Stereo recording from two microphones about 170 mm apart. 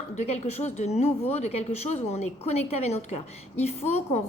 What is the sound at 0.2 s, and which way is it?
A woman's voice, 40° left (ahead or behind).